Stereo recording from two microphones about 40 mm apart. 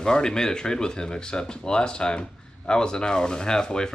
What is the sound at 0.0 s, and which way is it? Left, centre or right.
Speech, centre.